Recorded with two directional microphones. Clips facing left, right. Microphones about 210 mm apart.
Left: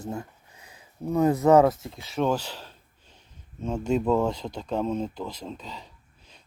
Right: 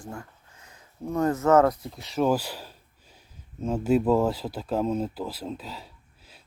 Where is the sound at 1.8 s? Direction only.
Centre (ahead or behind).